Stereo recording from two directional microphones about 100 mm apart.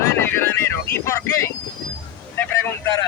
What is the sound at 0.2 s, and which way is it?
Vehicle, 25° left (ahead or behind).